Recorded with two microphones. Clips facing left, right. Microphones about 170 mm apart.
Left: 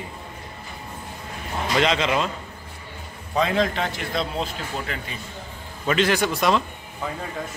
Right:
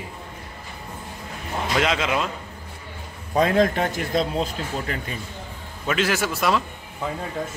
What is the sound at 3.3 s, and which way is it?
Speech, 45° right (ahead or behind).